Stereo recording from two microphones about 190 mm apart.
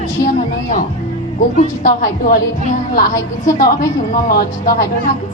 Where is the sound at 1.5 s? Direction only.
45° left (ahead or behind).